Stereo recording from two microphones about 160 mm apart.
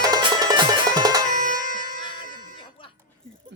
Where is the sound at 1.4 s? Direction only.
55° left (ahead or behind).